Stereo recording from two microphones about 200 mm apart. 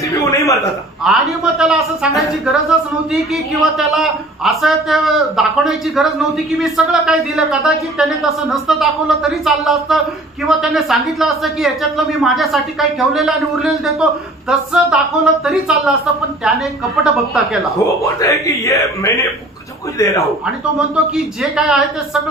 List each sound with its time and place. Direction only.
0.1 s a sound: 15° left (ahead or behind)
1.0 s speech: centre (ahead or behind)
3.7 s speech: centre (ahead or behind)
18.0 s speech: 15° left (ahead or behind)
20.9 s speech: 5° right (ahead or behind)